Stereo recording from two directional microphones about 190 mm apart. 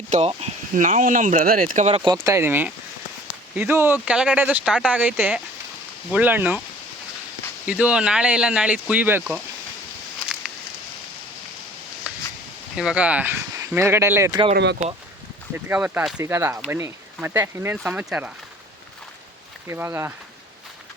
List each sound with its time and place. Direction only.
0.1 s speech: 35° right (ahead or behind)
2.2 s speech: 15° right (ahead or behind)
7.7 s speech: 5° right (ahead or behind)
12.1 s a sound: 5° right (ahead or behind)
12.7 s speech: 5° right (ahead or behind); by 14.5 s 20° right (ahead or behind)
14.5 s speech: 60° right (ahead or behind)
15.5 s speech: 10° right (ahead or behind)
19.6 s speech: 15° right (ahead or behind)